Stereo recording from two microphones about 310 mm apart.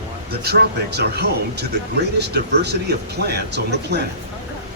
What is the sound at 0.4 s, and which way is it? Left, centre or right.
Speech, right.